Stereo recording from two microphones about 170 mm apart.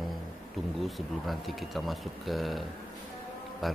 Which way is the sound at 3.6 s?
Centre (ahead or behind).